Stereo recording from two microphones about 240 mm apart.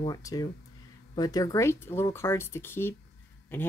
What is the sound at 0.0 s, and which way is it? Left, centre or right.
Speech, centre.